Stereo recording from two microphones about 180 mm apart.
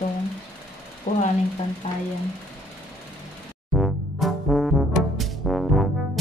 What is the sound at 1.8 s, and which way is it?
Speech, 35° left (ahead or behind).